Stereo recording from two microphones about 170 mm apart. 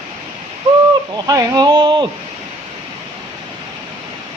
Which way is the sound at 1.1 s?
20° right (ahead or behind).